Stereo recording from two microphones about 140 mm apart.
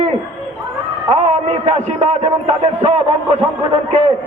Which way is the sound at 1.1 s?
50° right (ahead or behind).